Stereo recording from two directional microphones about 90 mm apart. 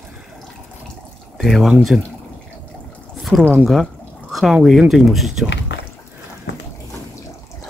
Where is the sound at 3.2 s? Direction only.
Centre (ahead or behind).